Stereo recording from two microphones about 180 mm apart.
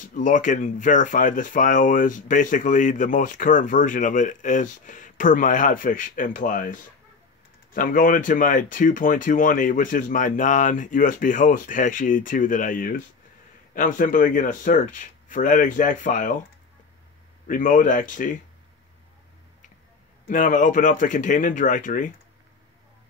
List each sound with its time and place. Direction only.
0.0 s speech: 45° left (ahead or behind)
17.5 s speech: 45° left (ahead or behind)
20.2 s speech: 45° left (ahead or behind)